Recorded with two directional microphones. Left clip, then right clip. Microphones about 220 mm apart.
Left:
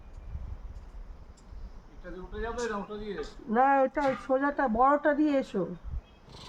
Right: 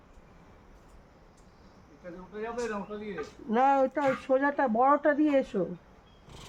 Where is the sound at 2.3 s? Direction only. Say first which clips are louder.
Left 1 dB; 15° left (ahead or behind).